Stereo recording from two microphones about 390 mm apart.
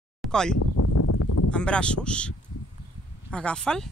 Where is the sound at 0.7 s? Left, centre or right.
Left.